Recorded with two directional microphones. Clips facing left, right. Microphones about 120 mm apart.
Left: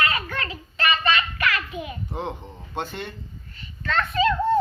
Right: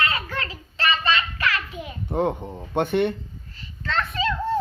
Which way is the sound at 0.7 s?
30° right (ahead or behind).